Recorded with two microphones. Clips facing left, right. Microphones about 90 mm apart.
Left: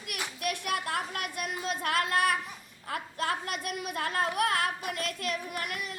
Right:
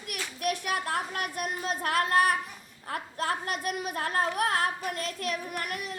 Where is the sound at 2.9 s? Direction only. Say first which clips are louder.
Right 1 dB; 40° right (ahead or behind).